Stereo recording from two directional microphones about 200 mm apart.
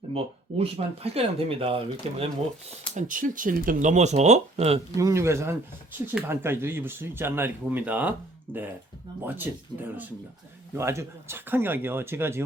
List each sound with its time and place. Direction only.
0.1 s speech: 30° right (ahead or behind)
2.9 s speech: 40° right (ahead or behind)
4.9 s speech: 15° right (ahead or behind)
10.8 s speech: 15° right (ahead or behind)